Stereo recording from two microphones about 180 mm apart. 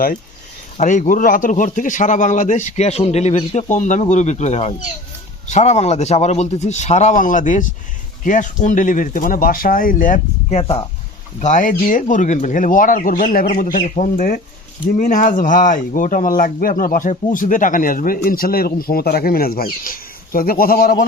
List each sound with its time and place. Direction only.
0.8 s a man's voice: 45° left (ahead or behind)
10.6 s a man's voice: 30° left (ahead or behind)
11.3 s speech: 45° left (ahead or behind)